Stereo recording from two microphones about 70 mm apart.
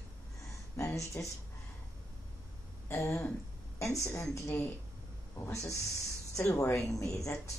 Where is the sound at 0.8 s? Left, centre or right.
Left.